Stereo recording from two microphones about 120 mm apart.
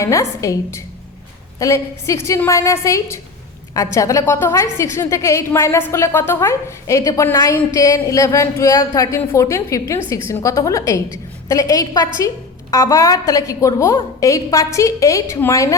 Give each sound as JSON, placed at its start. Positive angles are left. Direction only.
{"t": 0.0, "sound": "a woman's voice", "side_deg": 25}